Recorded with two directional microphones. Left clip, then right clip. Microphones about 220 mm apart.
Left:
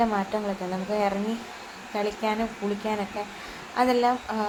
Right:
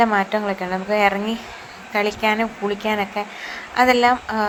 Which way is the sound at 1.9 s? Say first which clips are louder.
Right 8 dB; 20° right (ahead or behind).